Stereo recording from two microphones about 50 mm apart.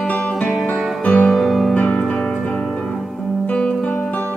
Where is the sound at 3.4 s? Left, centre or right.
Left.